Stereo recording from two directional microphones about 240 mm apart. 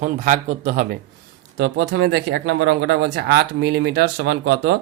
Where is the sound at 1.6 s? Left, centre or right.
Right.